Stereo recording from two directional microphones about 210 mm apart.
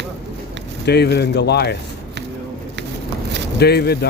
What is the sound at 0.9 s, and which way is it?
Speech, 50° left (ahead or behind).